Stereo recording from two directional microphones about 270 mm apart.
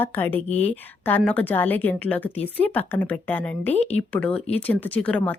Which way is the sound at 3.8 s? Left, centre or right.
Left.